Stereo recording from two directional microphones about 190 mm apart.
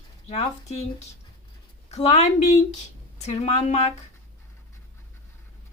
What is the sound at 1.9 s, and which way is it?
A woman's voice, 35° left (ahead or behind).